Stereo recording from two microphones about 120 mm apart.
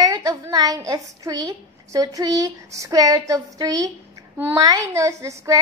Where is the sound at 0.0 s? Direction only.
30° right (ahead or behind).